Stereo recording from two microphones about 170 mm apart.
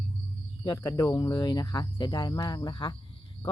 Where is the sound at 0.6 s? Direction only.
20° left (ahead or behind).